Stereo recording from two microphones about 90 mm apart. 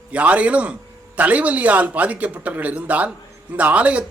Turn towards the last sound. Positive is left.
turn(degrees=-15)  # may be behind; listen again after turning